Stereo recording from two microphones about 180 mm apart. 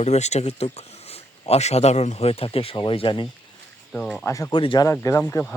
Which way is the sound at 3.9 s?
5° left (ahead or behind).